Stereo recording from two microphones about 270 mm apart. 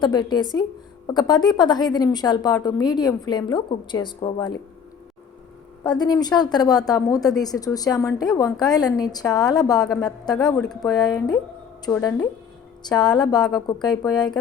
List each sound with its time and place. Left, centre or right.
0.0 s a woman's voice: centre
5.8 s a woman's voice: centre